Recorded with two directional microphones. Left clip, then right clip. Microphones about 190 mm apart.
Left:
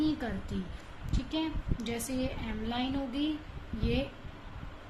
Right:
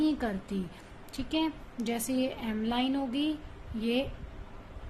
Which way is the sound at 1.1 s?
35° right (ahead or behind).